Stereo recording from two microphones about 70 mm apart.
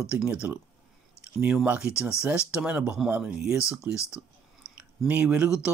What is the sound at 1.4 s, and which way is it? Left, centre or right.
Speech, right.